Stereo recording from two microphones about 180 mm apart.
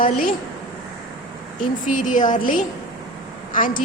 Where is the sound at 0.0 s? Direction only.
50° left (ahead or behind).